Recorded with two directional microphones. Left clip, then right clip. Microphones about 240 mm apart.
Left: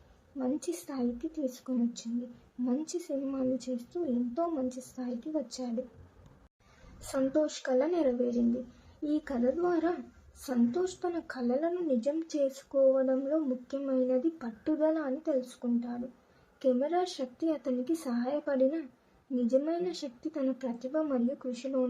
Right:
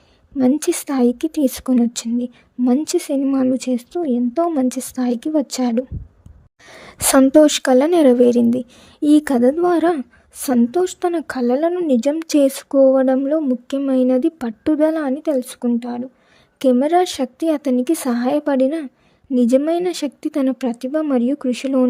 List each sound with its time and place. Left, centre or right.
0.3 s speech: right
7.1 s a woman's voice: right